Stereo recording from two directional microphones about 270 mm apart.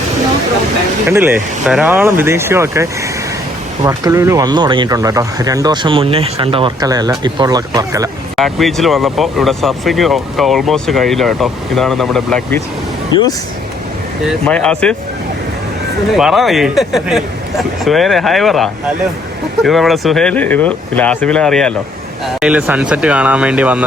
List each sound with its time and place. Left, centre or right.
1.1 s speech: centre
8.4 s speech: centre
13.1 s speech: centre
14.3 s speech: centre
16.1 s speech: centre